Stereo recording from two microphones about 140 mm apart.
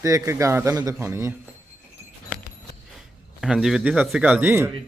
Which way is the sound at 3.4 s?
Centre (ahead or behind).